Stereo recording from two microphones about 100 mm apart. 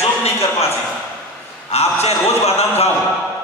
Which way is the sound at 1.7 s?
90° left.